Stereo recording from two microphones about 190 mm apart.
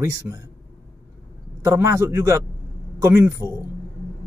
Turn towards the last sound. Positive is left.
turn(degrees=-15)  # may be behind; listen again after turning